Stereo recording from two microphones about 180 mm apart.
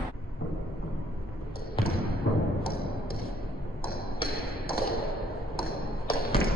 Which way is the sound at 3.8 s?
55° left (ahead or behind).